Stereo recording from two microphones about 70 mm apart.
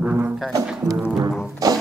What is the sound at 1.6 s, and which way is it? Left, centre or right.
Music, right.